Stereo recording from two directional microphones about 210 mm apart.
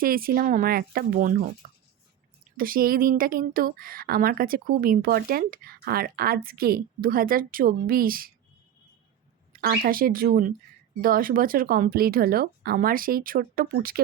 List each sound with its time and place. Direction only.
0.0 s a woman's voice: 45° right (ahead or behind)
2.6 s a woman's voice: 45° right (ahead or behind)
9.5 s a woman's voice: 45° right (ahead or behind)